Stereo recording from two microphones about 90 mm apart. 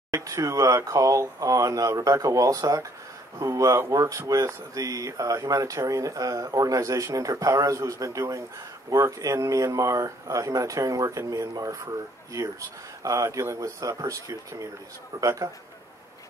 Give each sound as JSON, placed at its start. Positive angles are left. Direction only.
{"t": 0.1, "sound": "speech", "side_deg": -35}